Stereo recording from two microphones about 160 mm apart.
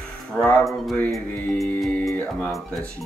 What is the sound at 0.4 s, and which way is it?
Speech, 5° left (ahead or behind).